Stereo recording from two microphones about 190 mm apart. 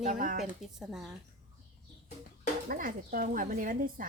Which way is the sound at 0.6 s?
Centre (ahead or behind).